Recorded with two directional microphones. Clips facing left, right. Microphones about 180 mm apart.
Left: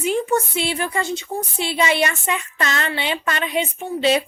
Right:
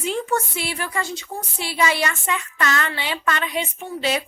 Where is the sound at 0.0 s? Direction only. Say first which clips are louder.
Left 4 dB; 15° left (ahead or behind).